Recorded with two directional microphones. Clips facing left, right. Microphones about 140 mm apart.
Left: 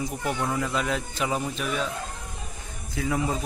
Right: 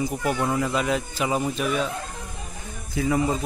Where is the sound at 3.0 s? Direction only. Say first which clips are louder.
Right 4 dB; 5° right (ahead or behind).